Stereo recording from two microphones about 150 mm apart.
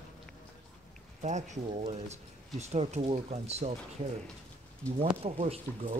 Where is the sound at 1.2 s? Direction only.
50° right (ahead or behind).